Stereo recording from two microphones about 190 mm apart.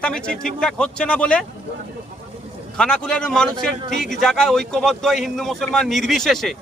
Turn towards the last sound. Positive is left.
turn(degrees=0)  # may be behind; listen again after turning